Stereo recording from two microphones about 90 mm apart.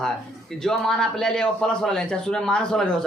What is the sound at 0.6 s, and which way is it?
A man's voice, 5° left (ahead or behind).